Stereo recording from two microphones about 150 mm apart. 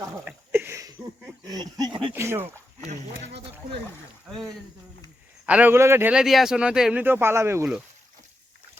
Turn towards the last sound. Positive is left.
turn(degrees=-15)  # may be behind; listen again after turning